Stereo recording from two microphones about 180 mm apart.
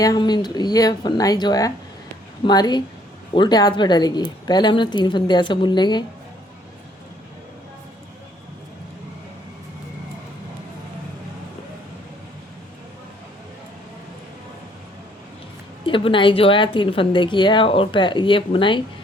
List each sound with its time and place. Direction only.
0.0 s a woman's voice: 20° left (ahead or behind)
15.9 s a woman's voice: 30° left (ahead or behind)